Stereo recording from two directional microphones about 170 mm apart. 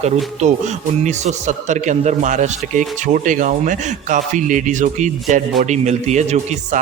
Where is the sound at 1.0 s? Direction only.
40° right (ahead or behind).